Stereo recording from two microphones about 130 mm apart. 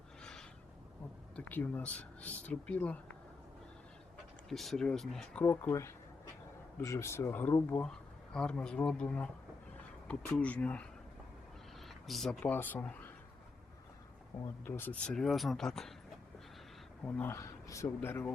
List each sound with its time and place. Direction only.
0.2 s a sound: 5° left (ahead or behind)
1.4 s speech: 10° left (ahead or behind)
4.4 s speech: centre (ahead or behind)
6.8 s speech: 20° left (ahead or behind)
12.0 s speech: centre (ahead or behind)
14.6 s speech: 10° left (ahead or behind)
15.1 s speech: centre (ahead or behind)
17.0 s speech: 10° left (ahead or behind)